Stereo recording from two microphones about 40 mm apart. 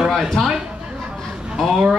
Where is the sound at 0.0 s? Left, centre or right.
Centre.